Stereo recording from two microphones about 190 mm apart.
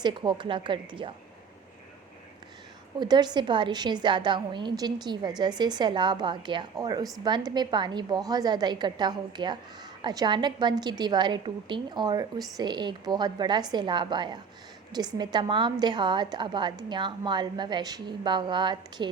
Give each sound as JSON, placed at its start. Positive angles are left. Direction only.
{"t": 0.0, "sound": "a woman's voice", "side_deg": -25}
{"t": 3.0, "sound": "a woman's voice", "side_deg": -20}